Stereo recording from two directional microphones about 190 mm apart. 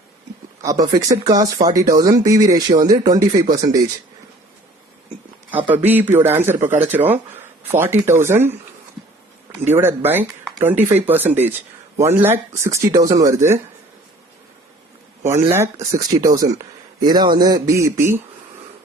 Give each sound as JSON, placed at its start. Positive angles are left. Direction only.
{"t": 0.6, "sound": "speech", "side_deg": -20}
{"t": 5.5, "sound": "speech", "side_deg": -10}
{"t": 9.6, "sound": "speech", "side_deg": -10}
{"t": 15.2, "sound": "speech", "side_deg": -10}